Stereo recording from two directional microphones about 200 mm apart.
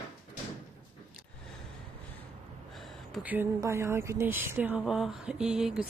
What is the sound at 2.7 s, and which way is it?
Speech, centre (ahead or behind).